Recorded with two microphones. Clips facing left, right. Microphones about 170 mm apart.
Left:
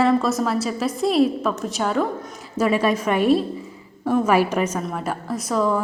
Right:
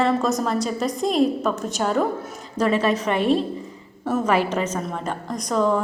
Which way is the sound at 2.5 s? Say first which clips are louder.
Left 1 dB; 10° left (ahead or behind).